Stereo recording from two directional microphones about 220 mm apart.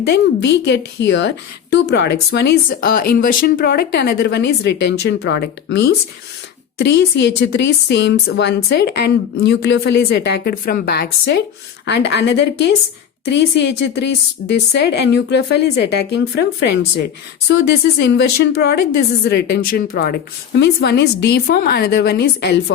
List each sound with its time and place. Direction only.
0.0 s a woman's voice: 50° left (ahead or behind)